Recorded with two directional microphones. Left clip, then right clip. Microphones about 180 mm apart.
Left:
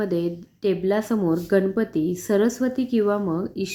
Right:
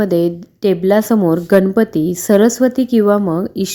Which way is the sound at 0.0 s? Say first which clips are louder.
Right 10 dB; 40° right (ahead or behind).